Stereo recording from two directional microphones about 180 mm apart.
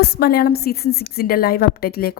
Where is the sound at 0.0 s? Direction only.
60° left (ahead or behind).